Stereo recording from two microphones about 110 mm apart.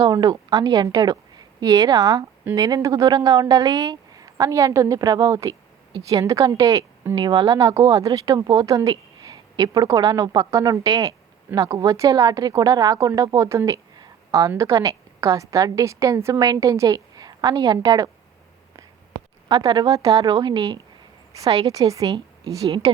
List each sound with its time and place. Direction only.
0.0 s a woman's voice: 40° right (ahead or behind)
7.2 s speech: 45° right (ahead or behind)
7.6 s a woman's voice: 30° right (ahead or behind)
19.5 s a woman's voice: 40° right (ahead or behind)
22.6 s a woman's voice: 65° right (ahead or behind)